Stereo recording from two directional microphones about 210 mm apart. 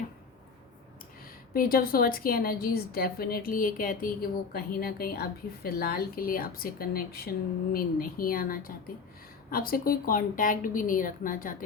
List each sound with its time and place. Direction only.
1.5 s a woman's voice: 45° left (ahead or behind)